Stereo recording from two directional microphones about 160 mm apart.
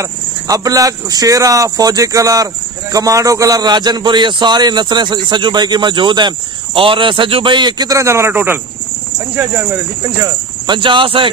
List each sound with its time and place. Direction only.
0.0 s speech: 20° right (ahead or behind)
10.0 s speech: 25° right (ahead or behind)